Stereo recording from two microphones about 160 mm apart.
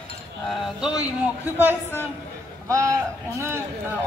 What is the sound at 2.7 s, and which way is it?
Speech, 20° right (ahead or behind).